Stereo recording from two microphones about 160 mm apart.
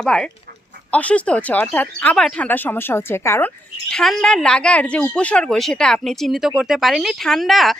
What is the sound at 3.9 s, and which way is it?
A woman's voice, 5° left (ahead or behind).